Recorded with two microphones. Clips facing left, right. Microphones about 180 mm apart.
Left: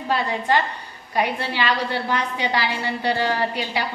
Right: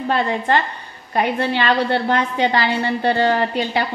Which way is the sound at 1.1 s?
50° right (ahead or behind).